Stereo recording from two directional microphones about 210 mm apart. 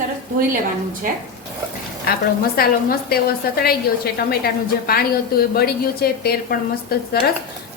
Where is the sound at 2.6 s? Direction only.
45° left (ahead or behind).